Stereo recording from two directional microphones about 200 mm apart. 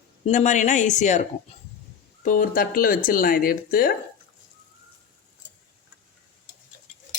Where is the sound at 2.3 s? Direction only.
45° left (ahead or behind).